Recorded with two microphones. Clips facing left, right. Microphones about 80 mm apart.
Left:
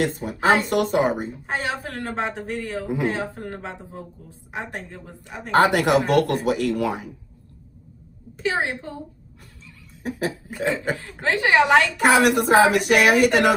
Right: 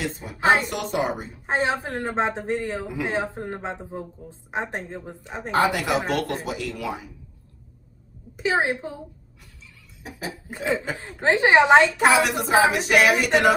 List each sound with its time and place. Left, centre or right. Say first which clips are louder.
0.0 s speech: left 2 dB; left
1.5 s a woman's voice: right 5 dB; right
5.5 s speech: left 4 dB; left
8.4 s a woman's voice: right 2 dB; centre
10.0 s a sound: left 8 dB; left
11.0 s a woman's voice: right 3 dB; right
12.1 s a woman's voice: left 3 dB; left